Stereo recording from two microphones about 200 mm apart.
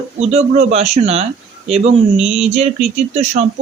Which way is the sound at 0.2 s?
35° right (ahead or behind).